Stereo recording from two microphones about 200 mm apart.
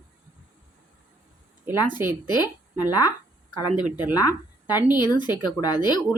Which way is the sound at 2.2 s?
20° left (ahead or behind).